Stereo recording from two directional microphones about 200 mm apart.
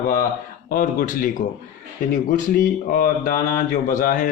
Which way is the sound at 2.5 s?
45° left (ahead or behind).